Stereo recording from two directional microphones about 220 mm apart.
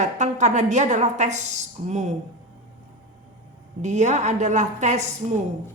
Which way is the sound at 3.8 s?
30° right (ahead or behind).